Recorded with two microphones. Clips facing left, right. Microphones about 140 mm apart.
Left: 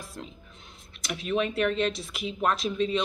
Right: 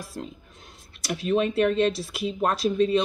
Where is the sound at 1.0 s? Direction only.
35° right (ahead or behind).